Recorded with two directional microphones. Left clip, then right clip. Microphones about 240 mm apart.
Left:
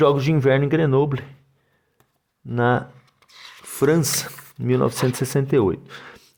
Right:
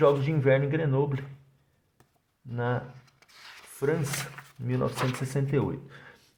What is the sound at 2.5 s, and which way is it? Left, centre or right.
Speech, left.